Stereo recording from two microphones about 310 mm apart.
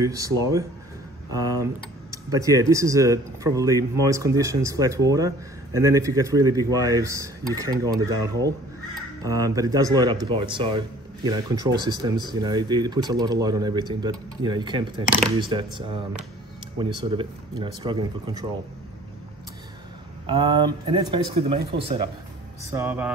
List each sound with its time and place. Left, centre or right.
0.0 s speech: centre
1.6 s speech: centre
20.2 s speech: centre
22.7 s speech: centre